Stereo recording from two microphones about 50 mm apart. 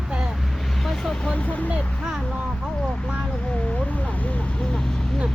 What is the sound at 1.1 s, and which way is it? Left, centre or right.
Speech, left.